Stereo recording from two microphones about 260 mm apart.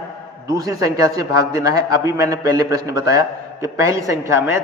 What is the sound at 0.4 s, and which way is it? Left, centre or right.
A man's voice, centre.